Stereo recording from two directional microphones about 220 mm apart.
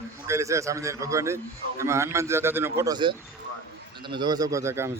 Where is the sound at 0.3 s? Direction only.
15° right (ahead or behind).